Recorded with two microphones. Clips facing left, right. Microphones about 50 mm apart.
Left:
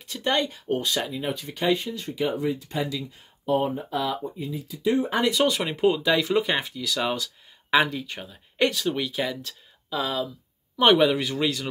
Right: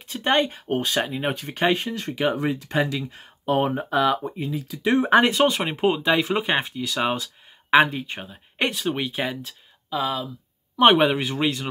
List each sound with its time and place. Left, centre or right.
0.0 s speech: right
5.2 s speech: right
9.4 s speech: centre
10.8 s speech: right